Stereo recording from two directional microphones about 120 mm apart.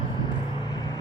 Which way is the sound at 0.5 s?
35° left (ahead or behind).